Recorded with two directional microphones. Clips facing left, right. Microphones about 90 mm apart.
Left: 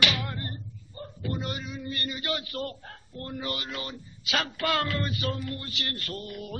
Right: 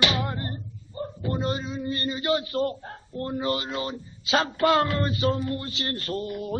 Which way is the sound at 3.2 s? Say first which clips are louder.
Right 7 dB; 30° right (ahead or behind).